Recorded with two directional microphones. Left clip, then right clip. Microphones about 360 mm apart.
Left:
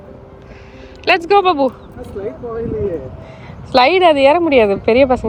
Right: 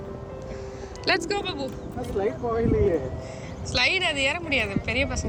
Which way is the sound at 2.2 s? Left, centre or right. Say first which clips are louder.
Left 1 dB; centre.